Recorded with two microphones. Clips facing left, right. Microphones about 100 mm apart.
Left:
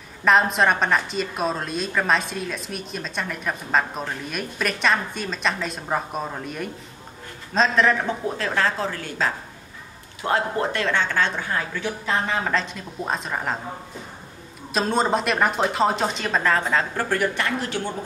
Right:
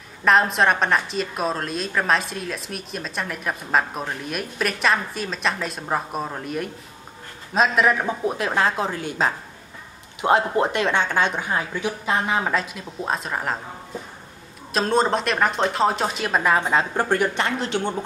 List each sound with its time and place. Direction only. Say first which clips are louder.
0.2 s a woman's voice: even; centre (ahead or behind)
14.7 s a woman's voice: right 1 dB; centre (ahead or behind); by 17.8 s 20° right (ahead or behind)